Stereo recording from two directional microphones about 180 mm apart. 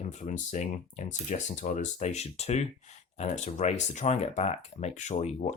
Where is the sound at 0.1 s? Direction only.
40° left (ahead or behind).